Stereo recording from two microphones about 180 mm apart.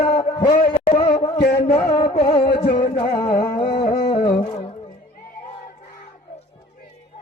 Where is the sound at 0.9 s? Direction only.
30° left (ahead or behind).